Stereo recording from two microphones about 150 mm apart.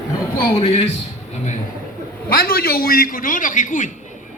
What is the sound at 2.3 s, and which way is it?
A man's voice, 90° left.